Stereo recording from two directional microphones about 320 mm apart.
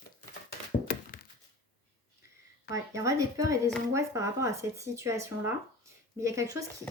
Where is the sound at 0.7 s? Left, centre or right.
Left.